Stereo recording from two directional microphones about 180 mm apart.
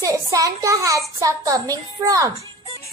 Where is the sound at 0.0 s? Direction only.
15° right (ahead or behind).